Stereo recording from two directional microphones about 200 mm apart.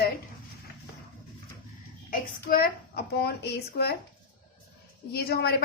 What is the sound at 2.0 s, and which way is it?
A woman's voice, 45° left (ahead or behind).